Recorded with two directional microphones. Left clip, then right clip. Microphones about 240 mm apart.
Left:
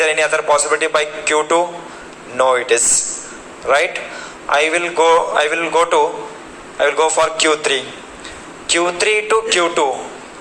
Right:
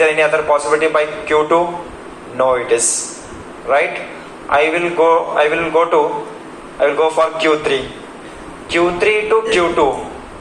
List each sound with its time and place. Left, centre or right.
0.0 s a man's voice: left
4.4 s a man's voice: left